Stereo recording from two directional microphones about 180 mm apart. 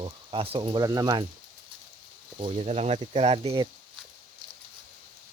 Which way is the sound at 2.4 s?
35° right (ahead or behind).